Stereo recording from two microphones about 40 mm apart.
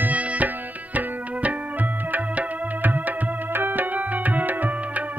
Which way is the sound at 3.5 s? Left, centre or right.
Right.